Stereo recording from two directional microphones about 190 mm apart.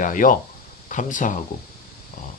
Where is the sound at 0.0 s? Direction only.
45° left (ahead or behind).